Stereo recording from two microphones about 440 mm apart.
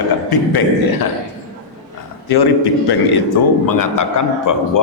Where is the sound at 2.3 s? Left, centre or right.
Left.